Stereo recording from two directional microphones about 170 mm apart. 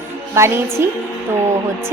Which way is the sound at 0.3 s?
15° right (ahead or behind).